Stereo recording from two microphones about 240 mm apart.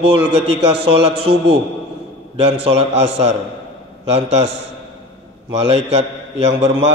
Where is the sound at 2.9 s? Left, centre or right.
Right.